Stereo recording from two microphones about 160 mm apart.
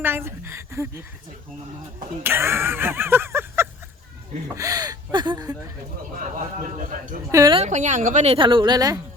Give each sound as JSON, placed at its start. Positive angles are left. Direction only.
{"t": 0.0, "sound": "speech", "side_deg": -15}
{"t": 2.2, "sound": "speech", "side_deg": -15}
{"t": 6.7, "sound": "a man's voice", "side_deg": -55}
{"t": 7.3, "sound": "speech", "side_deg": -20}
{"t": 7.5, "sound": "speech", "side_deg": -45}